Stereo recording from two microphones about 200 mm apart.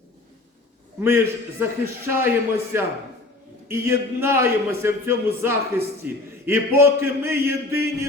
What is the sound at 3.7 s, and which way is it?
A man's voice, 10° right (ahead or behind).